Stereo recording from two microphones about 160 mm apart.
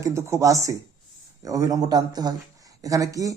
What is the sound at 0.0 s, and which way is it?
Speech, 20° right (ahead or behind).